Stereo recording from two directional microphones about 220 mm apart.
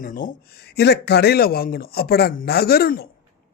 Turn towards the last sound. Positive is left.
turn(degrees=45)  # may be behind; listen again after turning